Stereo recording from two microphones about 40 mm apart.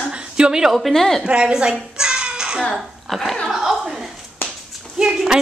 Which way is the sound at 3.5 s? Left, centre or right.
Centre.